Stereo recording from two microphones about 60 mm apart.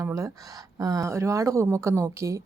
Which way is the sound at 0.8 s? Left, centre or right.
Right.